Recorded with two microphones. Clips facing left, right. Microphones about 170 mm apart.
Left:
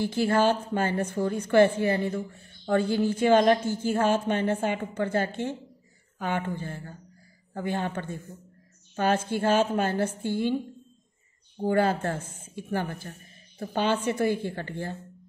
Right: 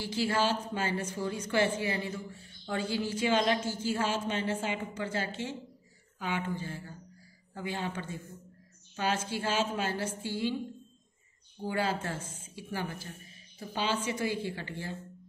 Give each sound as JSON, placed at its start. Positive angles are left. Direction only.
{"t": 0.0, "sound": "a woman's voice", "side_deg": 55}
{"t": 11.6, "sound": "a woman's voice", "side_deg": 50}